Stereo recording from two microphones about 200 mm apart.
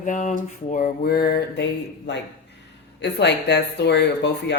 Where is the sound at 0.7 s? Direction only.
45° left (ahead or behind).